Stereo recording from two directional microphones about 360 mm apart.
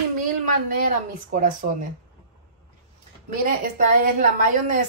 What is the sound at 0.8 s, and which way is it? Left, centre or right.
Speech, right.